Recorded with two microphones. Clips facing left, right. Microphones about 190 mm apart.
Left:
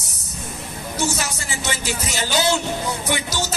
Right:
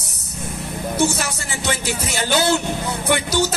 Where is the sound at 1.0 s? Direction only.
60° right (ahead or behind).